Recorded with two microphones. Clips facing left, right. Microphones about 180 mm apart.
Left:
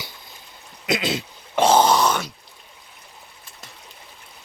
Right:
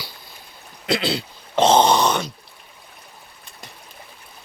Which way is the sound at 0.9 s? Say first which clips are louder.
Right 1 dB; 20° left (ahead or behind).